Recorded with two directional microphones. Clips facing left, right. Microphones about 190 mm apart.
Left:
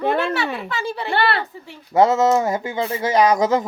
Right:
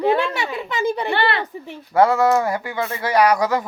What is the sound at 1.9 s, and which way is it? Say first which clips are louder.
Speech: even; 20° left (ahead or behind).